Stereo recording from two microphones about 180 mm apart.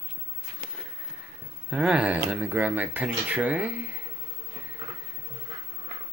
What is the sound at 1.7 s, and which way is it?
Speech, 5° right (ahead or behind).